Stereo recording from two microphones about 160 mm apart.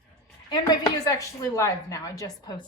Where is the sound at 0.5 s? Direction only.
25° left (ahead or behind).